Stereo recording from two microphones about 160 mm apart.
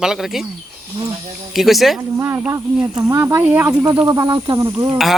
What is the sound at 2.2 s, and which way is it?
Speech, 15° right (ahead or behind).